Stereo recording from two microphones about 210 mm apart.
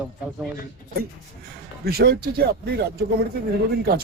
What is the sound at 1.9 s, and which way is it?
Speech, 45° right (ahead or behind).